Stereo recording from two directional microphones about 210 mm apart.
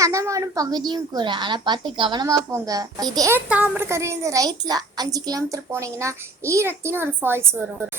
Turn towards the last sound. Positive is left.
turn(degrees=-10)  # may be behind; listen again after turning